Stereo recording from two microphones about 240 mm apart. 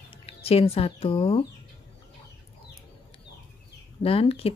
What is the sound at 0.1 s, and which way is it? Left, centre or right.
Speech, left.